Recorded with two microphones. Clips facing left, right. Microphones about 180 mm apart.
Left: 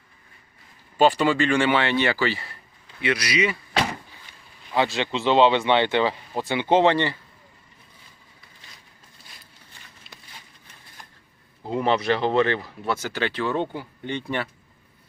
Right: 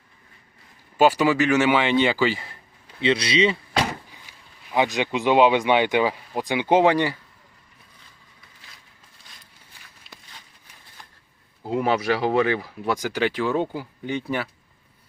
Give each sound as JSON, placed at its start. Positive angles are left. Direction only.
{"t": 0.9, "sound": "speech", "side_deg": -10}
{"t": 4.3, "sound": "speech", "side_deg": -15}
{"t": 11.6, "sound": "speech", "side_deg": -5}